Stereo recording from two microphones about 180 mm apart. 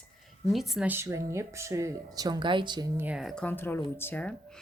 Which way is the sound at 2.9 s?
10° right (ahead or behind).